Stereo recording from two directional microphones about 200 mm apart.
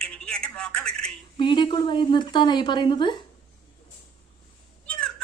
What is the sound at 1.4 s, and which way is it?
A woman's voice, 25° left (ahead or behind).